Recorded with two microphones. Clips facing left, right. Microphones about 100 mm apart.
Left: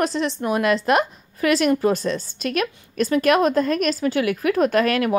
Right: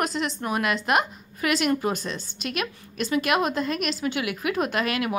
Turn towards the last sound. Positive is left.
turn(degrees=40)  # may be behind; listen again after turning